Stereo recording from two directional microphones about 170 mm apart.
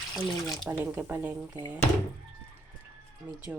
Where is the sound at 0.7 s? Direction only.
15° right (ahead or behind).